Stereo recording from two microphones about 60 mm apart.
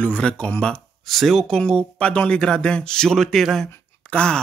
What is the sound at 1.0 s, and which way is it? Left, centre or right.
Speech, centre.